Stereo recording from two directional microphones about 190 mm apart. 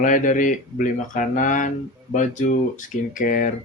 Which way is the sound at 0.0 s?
45° left (ahead or behind).